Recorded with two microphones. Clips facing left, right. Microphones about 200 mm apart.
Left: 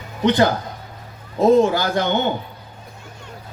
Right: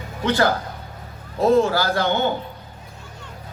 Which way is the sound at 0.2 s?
20° left (ahead or behind).